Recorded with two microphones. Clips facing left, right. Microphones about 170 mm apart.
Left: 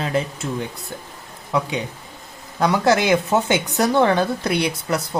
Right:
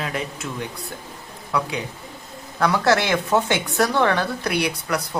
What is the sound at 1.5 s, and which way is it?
Speech, 25° left (ahead or behind).